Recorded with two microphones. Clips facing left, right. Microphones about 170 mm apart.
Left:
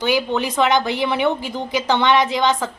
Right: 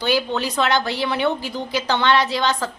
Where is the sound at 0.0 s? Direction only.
15° left (ahead or behind).